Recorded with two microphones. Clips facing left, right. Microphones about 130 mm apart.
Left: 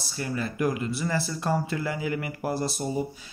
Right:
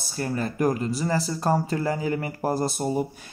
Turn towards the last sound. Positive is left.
turn(degrees=-50)  # may be behind; listen again after turning